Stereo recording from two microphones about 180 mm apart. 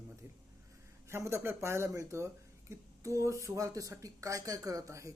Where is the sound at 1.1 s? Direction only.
15° right (ahead or behind).